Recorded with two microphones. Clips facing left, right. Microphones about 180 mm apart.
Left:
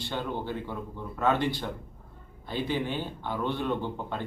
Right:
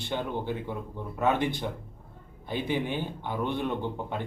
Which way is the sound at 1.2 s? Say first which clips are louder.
Even; 15° right (ahead or behind).